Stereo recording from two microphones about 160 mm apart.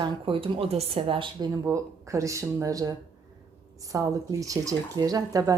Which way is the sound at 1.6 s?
20° right (ahead or behind).